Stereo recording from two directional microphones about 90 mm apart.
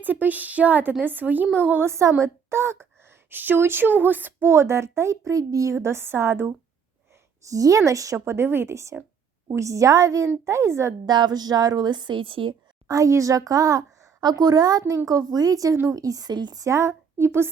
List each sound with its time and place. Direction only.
0.0 s speech: 20° right (ahead or behind)
7.4 s speech: 40° right (ahead or behind)
11.0 s a woman's voice: 50° right (ahead or behind); by 12.5 s 75° right (ahead or behind)
12.9 s speech: 35° right (ahead or behind)
16.6 s speech: 30° right (ahead or behind)